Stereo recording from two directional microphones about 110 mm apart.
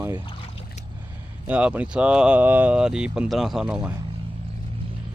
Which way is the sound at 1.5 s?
10° right (ahead or behind).